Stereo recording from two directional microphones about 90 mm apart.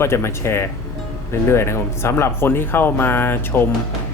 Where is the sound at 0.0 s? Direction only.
30° left (ahead or behind).